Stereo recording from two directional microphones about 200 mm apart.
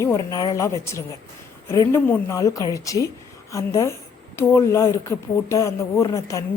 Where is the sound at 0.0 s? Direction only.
15° left (ahead or behind).